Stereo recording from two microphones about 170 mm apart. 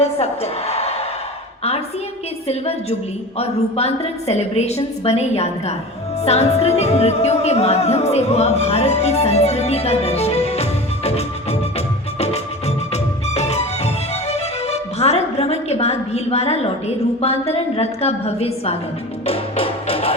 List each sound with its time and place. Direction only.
0.0 s a woman's voice: 40° left (ahead or behind)
3.3 s music: 35° left (ahead or behind)
12.2 s music: 40° left (ahead or behind)